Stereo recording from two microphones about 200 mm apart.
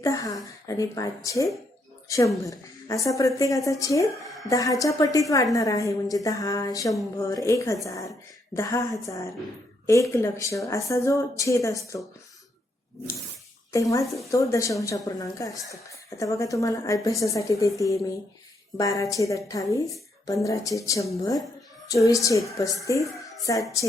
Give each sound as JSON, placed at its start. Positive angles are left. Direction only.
{"t": 0.0, "sound": "a sound", "side_deg": 15}
{"t": 0.7, "sound": "speech", "side_deg": 15}
{"t": 13.7, "sound": "speech", "side_deg": 15}